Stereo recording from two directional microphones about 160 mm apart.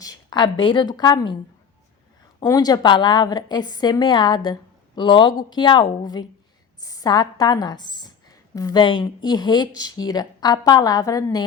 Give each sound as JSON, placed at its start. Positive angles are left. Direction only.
{"t": 0.0, "sound": "a woman's voice", "side_deg": 25}
{"t": 2.4, "sound": "a woman's voice", "side_deg": 25}